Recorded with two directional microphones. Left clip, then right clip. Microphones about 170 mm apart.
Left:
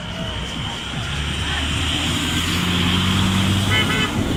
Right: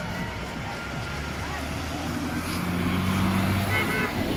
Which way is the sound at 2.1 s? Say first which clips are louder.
Left 9 dB; 55° right (ahead or behind).